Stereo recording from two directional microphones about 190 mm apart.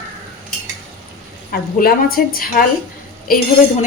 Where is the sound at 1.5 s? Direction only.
50° left (ahead or behind).